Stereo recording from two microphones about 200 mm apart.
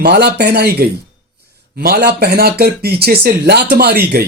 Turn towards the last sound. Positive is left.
turn(degrees=-50)  # may be behind; listen again after turning